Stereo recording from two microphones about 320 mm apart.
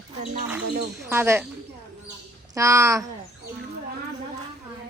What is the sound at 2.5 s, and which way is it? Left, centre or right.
Speech, centre.